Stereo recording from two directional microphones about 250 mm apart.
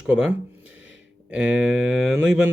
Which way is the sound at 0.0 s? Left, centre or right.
Centre.